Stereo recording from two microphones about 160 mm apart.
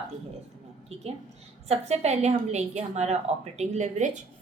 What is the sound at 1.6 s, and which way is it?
A woman's voice, 40° right (ahead or behind).